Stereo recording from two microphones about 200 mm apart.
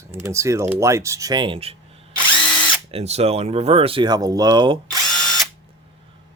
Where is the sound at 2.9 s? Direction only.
30° right (ahead or behind).